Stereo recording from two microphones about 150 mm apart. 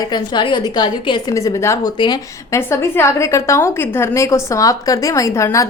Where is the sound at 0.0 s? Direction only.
30° left (ahead or behind).